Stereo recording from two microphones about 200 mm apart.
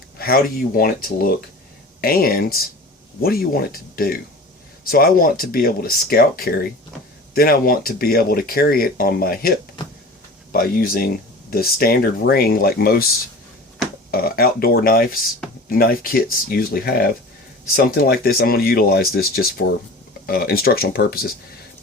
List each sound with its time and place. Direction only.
0.2 s speech: 50° left (ahead or behind)
10.5 s speech: 45° left (ahead or behind)
14.1 s speech: 50° left (ahead or behind)